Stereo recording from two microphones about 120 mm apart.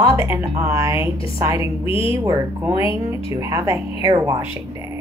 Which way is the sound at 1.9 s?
50° left (ahead or behind).